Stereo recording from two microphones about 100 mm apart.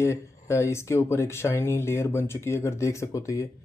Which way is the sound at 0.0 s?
30° left (ahead or behind).